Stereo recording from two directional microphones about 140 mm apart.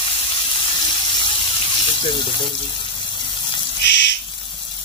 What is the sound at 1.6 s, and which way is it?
Water, 40° left (ahead or behind).